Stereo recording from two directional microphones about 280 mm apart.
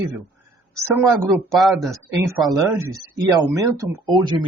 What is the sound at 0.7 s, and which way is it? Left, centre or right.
Speech, centre.